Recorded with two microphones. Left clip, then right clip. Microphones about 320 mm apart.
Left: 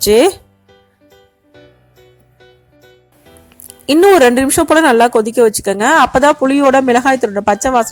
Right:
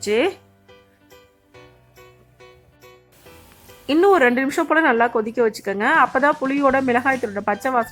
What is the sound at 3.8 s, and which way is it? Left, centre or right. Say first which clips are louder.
Speech: left 8 dB; centre.